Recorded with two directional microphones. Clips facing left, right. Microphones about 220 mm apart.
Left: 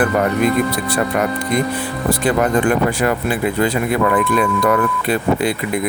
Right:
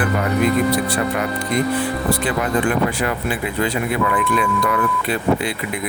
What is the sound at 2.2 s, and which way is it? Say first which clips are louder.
Speech: left 7 dB; 45° left (ahead or behind).